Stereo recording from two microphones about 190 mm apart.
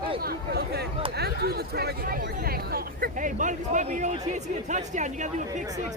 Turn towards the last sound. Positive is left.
turn(degrees=-40)  # may be behind; listen again after turning